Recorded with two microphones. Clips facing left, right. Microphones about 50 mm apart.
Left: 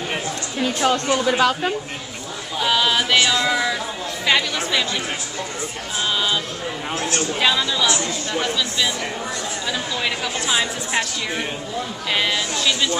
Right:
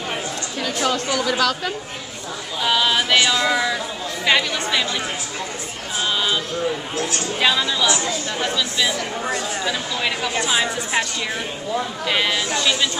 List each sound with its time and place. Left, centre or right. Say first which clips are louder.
0.9 s speech: left 2 dB; left
1.3 s speech: left 2 dB; left
2.6 s speech: even; centre
6.1 s a woman's voice: right 1 dB; centre
12.1 s speech: right 1 dB; centre